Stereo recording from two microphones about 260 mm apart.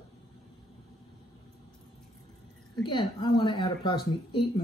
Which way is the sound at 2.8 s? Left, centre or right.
Centre.